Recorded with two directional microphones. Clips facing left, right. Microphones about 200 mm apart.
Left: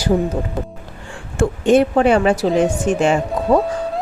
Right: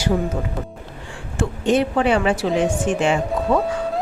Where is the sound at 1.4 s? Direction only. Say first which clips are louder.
Left 5 dB; 50° left (ahead or behind).